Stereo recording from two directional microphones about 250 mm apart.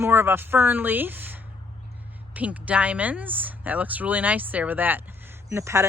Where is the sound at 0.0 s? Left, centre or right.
Centre.